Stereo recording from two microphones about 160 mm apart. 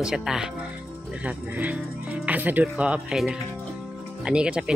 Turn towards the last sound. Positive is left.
turn(degrees=-5)  # may be behind; listen again after turning